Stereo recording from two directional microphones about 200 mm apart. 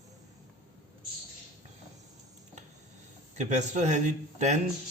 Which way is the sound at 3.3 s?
35° right (ahead or behind).